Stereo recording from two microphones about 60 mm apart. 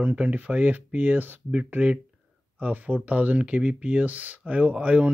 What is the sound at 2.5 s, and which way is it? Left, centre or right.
Speech, right.